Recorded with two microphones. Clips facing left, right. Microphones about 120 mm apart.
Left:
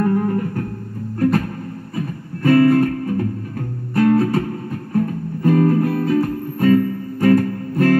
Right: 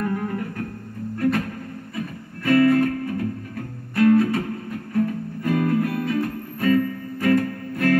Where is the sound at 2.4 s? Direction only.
35° left (ahead or behind).